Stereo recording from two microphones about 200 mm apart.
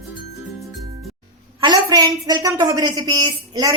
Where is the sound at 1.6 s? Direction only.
20° right (ahead or behind).